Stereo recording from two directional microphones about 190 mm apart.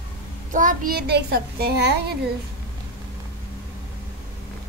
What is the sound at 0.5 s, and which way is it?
A woman's voice, 45° right (ahead or behind).